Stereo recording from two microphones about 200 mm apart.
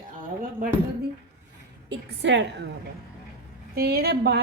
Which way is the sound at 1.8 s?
60° right (ahead or behind).